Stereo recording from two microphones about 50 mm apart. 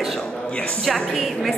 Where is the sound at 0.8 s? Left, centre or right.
Centre.